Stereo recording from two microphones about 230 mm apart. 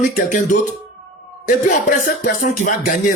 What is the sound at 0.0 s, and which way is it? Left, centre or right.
Speech, left.